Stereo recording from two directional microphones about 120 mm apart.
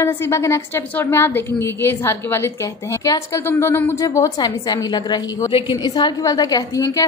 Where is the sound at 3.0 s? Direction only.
30° left (ahead or behind).